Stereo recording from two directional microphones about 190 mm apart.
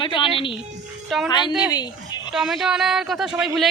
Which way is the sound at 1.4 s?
Centre (ahead or behind).